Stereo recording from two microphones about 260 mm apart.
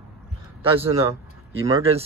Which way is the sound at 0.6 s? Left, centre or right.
Right.